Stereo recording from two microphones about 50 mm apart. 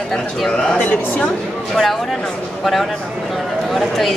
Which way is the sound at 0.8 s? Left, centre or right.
Left.